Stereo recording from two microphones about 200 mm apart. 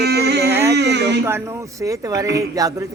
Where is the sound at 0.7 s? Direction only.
60° right (ahead or behind).